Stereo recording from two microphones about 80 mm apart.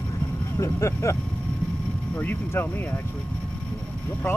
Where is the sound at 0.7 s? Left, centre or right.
Left.